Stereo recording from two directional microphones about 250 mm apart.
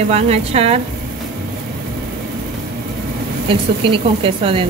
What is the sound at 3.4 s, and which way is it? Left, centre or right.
A woman's voice, right.